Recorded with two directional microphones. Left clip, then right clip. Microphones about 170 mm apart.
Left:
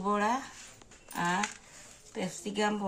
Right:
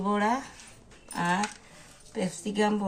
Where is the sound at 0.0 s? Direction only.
10° right (ahead or behind).